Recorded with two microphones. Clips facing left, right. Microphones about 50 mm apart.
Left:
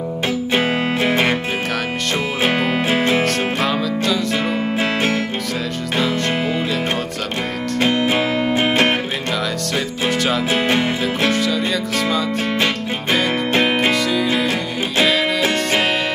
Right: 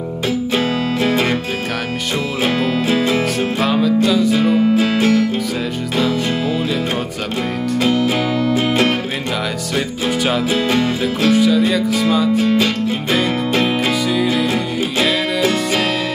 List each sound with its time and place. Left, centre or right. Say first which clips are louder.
0.5 s music: left 2 dB; left
2.4 s music: right 1 dB; left
3.3 s music: right 2 dB; centre
4.7 s music: right 4 dB; left
7.8 s music: even; left
10.0 s music: right 1 dB; centre
10.5 s speech: right 1 dB; left
11.3 s music: right 5 dB; centre
12.4 s speech: right 3 dB; left
13.5 s music: even; left